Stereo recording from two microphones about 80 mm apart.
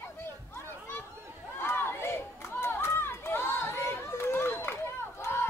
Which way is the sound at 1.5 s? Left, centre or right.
Left.